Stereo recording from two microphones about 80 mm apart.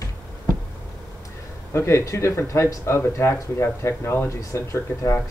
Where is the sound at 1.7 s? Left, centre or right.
Left.